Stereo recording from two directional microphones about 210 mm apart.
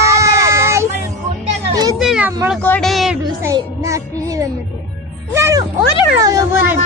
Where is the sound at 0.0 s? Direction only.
15° right (ahead or behind).